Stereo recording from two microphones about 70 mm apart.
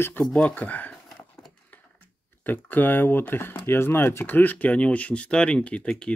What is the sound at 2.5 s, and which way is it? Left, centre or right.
Speech, left.